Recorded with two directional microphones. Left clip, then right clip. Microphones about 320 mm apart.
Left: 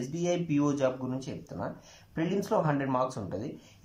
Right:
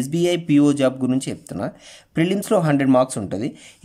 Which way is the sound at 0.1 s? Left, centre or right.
Right.